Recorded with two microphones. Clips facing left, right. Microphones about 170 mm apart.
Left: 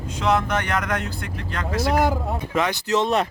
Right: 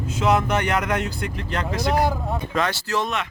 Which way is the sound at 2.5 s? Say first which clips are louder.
Left 3 dB; 15° left (ahead or behind).